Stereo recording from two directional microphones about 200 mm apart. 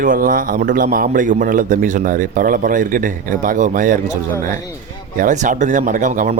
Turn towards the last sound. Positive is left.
turn(degrees=-40)  # may be behind; listen again after turning